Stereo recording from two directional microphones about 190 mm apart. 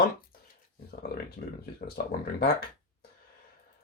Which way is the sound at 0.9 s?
55° left (ahead or behind).